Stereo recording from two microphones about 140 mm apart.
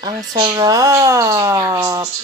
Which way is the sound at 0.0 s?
25° right (ahead or behind).